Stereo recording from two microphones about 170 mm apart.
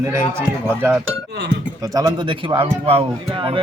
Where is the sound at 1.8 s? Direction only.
25° right (ahead or behind).